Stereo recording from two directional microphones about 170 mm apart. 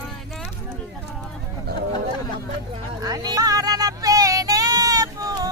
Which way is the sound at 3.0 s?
20° right (ahead or behind).